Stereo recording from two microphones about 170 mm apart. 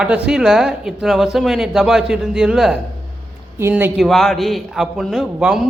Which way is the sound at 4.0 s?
Centre (ahead or behind).